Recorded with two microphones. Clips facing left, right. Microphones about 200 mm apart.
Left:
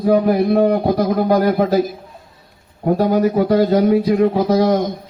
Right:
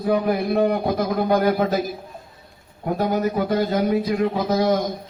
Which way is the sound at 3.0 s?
40° left (ahead or behind).